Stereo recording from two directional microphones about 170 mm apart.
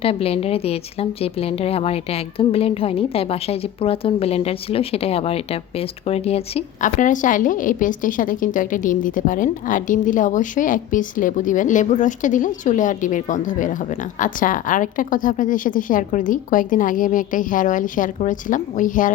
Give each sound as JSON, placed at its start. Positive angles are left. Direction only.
{"t": 0.0, "sound": "a woman's voice", "side_deg": 35}
{"t": 6.8, "sound": "a woman's voice", "side_deg": 50}